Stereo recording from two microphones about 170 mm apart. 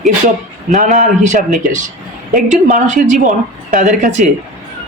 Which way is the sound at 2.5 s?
45° right (ahead or behind).